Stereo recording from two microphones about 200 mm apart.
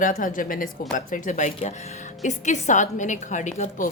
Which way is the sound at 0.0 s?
45° left (ahead or behind).